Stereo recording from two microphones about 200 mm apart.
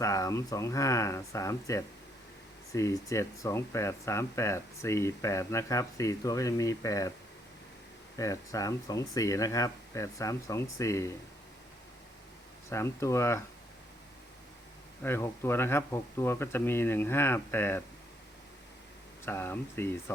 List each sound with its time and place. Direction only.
0.0 s speech: 15° left (ahead or behind)
8.2 s speech: 15° left (ahead or behind)
12.7 s speech: 15° left (ahead or behind)
15.0 s speech: 10° left (ahead or behind)
19.2 s speech: 10° left (ahead or behind)